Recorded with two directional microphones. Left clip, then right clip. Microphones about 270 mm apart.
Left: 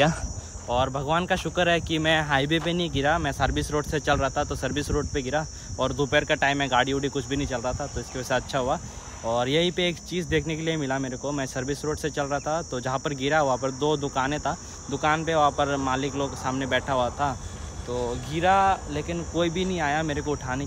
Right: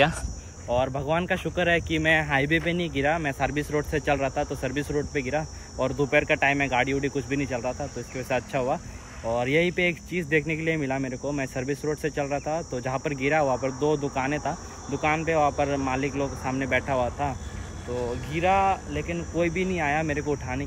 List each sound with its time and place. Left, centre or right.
0.7 s speech: centre